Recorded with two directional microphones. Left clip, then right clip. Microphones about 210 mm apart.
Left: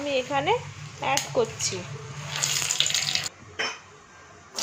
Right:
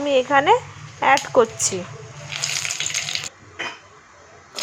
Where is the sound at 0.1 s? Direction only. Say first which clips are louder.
Right 9 dB; 30° right (ahead or behind).